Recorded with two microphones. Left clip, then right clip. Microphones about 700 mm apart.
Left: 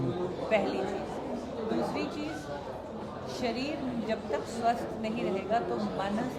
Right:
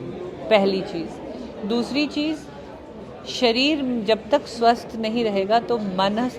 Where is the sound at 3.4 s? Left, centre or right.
Right.